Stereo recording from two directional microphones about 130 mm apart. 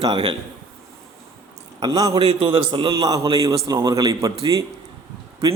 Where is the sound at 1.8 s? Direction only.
30° right (ahead or behind).